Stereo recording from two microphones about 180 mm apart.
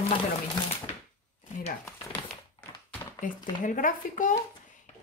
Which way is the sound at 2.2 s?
35° left (ahead or behind).